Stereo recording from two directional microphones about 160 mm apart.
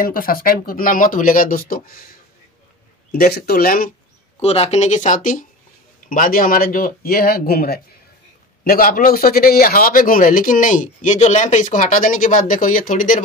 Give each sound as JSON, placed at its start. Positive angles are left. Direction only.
{"t": 0.0, "sound": "speech", "side_deg": 65}
{"t": 3.1, "sound": "speech", "side_deg": 75}
{"t": 4.4, "sound": "speech", "side_deg": 40}